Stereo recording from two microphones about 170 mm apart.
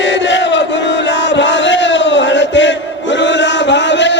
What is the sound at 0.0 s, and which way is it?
Battle cry, 90° left.